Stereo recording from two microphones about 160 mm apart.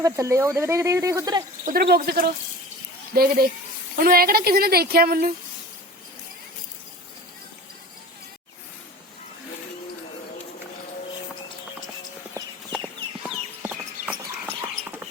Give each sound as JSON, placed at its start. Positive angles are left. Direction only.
{"t": 0.0, "sound": "speech", "side_deg": -20}
{"t": 1.6, "sound": "a woman's voice", "side_deg": -75}
{"t": 13.2, "sound": "horse", "side_deg": -5}